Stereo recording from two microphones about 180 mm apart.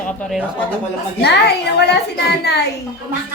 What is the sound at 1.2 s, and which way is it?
Speech, 70° left (ahead or behind).